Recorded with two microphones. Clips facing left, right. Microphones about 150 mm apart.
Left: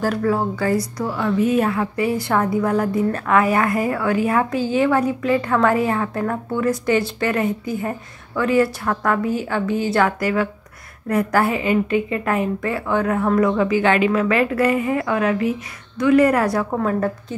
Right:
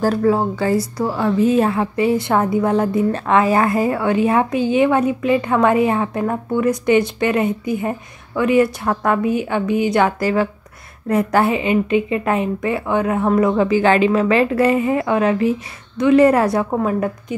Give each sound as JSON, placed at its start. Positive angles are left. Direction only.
{"t": 0.0, "sound": "a woman's voice", "side_deg": -30}
{"t": 10.1, "sound": "a woman's voice", "side_deg": -30}